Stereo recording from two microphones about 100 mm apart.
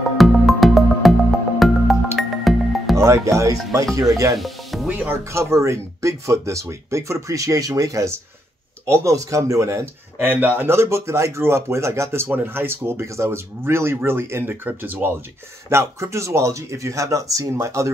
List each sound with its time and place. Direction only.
0.2 s music: centre (ahead or behind)
3.0 s speech: 30° right (ahead or behind)
4.4 s music: centre (ahead or behind)
4.8 s speech: 15° right (ahead or behind)
5.3 s speech: 30° right (ahead or behind)
10.1 s speech: 20° right (ahead or behind)